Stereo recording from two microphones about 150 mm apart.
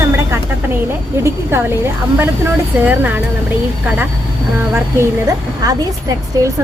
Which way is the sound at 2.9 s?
10° right (ahead or behind).